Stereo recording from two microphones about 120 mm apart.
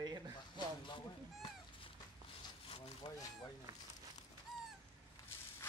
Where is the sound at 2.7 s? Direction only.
60° left (ahead or behind).